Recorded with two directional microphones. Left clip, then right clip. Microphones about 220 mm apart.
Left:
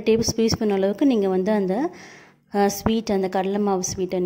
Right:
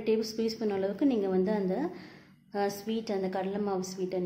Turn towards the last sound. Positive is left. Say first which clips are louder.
# left 9 dB
turn(degrees=40)  # may be behind; listen again after turning